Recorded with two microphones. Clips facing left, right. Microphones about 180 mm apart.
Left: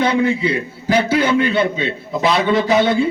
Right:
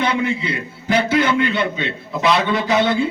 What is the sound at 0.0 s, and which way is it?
A man's voice, 30° left (ahead or behind).